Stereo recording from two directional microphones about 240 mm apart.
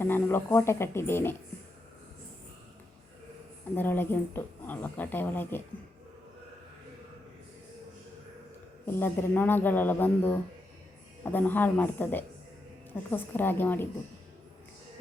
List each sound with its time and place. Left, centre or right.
0.0 s speech: centre
3.8 s speech: centre
8.9 s speech: centre